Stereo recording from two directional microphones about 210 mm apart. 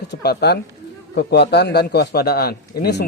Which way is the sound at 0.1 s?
50° left (ahead or behind).